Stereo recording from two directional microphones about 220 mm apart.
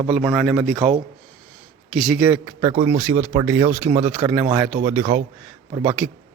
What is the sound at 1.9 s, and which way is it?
Speech, centre (ahead or behind).